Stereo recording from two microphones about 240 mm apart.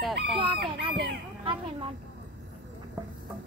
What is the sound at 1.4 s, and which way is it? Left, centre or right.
Speech, right.